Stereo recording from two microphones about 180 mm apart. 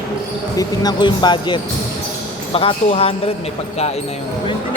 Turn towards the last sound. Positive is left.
turn(degrees=30)  # may be behind; listen again after turning